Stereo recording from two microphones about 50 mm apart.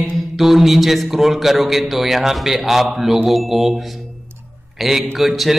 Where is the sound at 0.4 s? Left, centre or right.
Centre.